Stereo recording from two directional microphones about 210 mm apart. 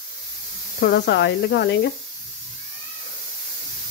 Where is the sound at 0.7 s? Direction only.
50° left (ahead or behind).